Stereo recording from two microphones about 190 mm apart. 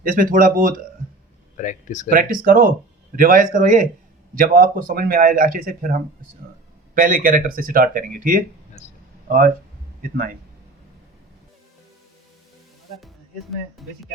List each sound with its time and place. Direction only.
0.0 s speech: 45° right (ahead or behind)
1.5 s speech: 40° left (ahead or behind)
2.0 s speech: 45° right (ahead or behind)
10.0 s speech: 45° right (ahead or behind)